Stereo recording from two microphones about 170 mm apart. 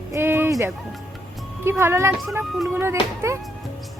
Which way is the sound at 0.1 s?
15° right (ahead or behind).